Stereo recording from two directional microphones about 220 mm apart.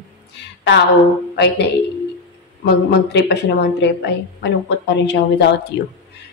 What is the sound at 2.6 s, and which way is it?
Speech, 50° left (ahead or behind).